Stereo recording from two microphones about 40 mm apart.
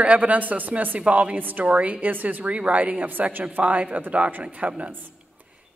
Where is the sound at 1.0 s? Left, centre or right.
Right.